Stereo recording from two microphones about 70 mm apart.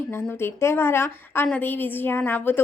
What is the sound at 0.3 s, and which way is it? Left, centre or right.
A woman's voice, left.